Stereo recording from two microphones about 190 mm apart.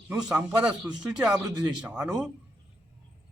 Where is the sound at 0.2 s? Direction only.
5° right (ahead or behind).